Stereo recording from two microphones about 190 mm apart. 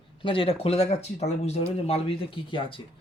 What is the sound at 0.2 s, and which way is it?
A man's voice, 30° left (ahead or behind).